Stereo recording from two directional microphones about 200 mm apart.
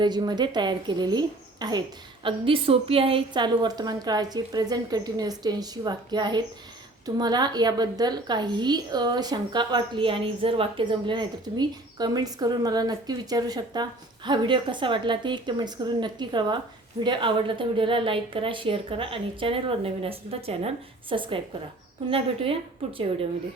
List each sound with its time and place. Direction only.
0.0 s a woman's voice: 20° right (ahead or behind)